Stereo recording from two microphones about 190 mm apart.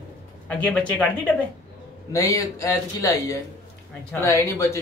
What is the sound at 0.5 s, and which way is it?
Speech, 5° left (ahead or behind).